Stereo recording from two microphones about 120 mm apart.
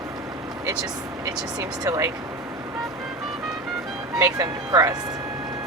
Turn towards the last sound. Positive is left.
turn(degrees=-30)  # may be behind; listen again after turning